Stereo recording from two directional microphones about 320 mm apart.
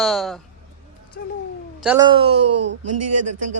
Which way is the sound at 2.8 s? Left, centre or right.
Right.